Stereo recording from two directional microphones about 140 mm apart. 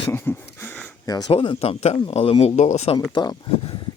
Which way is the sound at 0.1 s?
15° left (ahead or behind).